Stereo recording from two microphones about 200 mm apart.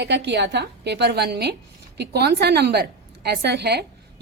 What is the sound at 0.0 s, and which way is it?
A woman's voice, 60° right (ahead or behind).